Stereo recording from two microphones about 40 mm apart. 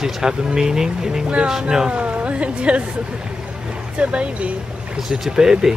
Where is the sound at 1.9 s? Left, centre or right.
Right.